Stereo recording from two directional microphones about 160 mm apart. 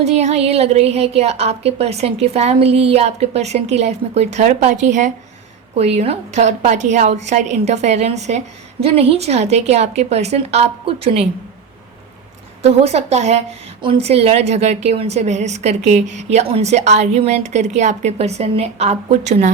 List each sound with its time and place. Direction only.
0.0 s a woman's voice: 45° right (ahead or behind)
12.6 s a woman's voice: 40° right (ahead or behind)